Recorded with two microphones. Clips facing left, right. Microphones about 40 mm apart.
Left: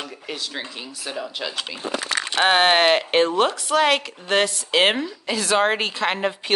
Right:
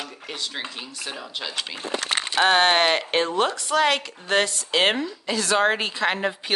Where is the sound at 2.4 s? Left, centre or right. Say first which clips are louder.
Left 2 dB; centre.